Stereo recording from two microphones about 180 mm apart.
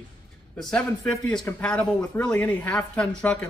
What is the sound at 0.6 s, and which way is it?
A man's voice, 5° left (ahead or behind).